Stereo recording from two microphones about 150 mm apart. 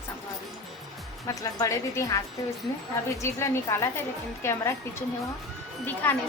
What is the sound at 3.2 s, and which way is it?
Speech, 20° left (ahead or behind).